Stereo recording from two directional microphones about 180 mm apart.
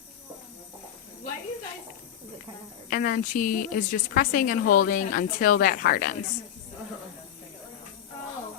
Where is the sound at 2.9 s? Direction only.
50° left (ahead or behind).